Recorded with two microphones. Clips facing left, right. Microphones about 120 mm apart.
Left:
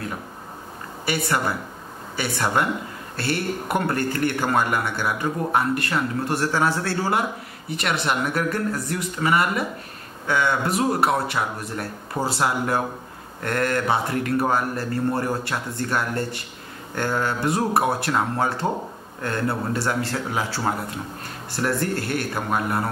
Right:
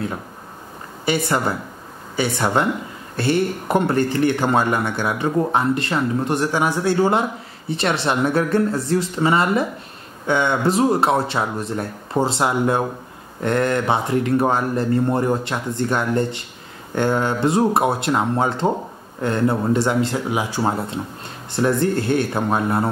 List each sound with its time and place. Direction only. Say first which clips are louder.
1.0 s speech: right 4 dB; 20° right (ahead or behind)